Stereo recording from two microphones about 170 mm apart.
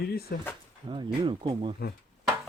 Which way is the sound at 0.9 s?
30° right (ahead or behind).